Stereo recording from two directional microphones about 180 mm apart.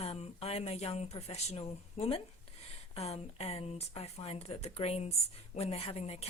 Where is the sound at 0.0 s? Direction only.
35° left (ahead or behind).